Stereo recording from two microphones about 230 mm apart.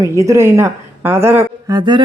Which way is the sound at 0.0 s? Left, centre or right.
Centre.